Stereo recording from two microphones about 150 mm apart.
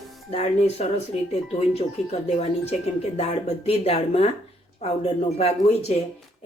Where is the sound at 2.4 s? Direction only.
45° left (ahead or behind).